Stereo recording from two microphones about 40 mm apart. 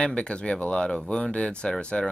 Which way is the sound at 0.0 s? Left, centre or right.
Left.